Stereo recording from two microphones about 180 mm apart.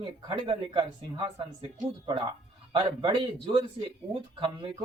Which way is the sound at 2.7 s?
30° right (ahead or behind).